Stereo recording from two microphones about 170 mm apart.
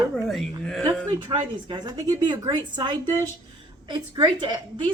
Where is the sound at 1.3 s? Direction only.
25° right (ahead or behind).